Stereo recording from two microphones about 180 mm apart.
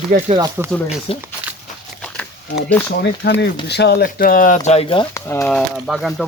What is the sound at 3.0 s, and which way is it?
Speech, 70° left (ahead or behind).